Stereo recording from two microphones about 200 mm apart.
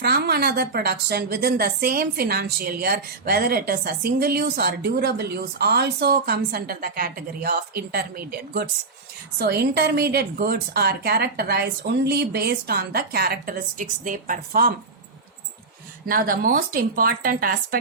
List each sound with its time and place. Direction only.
0.0 s a woman's voice: 55° right (ahead or behind)
16.0 s a woman's voice: 45° right (ahead or behind)